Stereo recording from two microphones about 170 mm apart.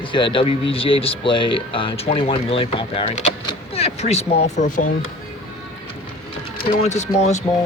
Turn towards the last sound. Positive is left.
turn(degrees=40)  # may be behind; listen again after turning